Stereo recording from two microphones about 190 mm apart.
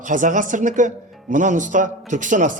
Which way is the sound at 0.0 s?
40° right (ahead or behind).